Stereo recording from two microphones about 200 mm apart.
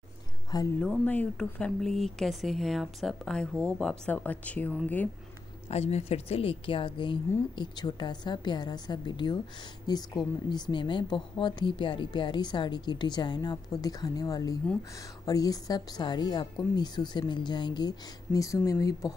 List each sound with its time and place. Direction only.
0.7 s speech: 5° left (ahead or behind)
5.7 s a woman's voice: 30° left (ahead or behind); by 19.1 s 15° left (ahead or behind)